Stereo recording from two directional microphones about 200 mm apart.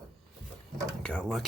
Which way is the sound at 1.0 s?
5° left (ahead or behind).